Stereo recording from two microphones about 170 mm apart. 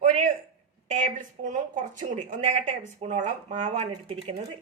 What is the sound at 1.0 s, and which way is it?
A woman's voice, 45° right (ahead or behind).